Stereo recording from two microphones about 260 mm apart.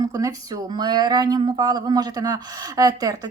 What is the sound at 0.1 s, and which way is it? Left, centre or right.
Speech, centre.